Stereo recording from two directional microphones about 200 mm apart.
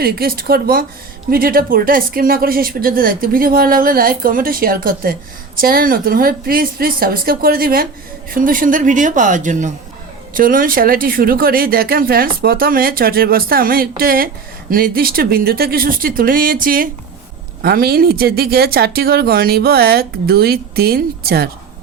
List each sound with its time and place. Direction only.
0.0 s a woman's voice: 50° right (ahead or behind)